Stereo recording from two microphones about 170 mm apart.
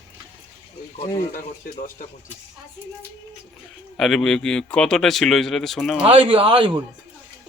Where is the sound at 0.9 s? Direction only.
25° left (ahead or behind).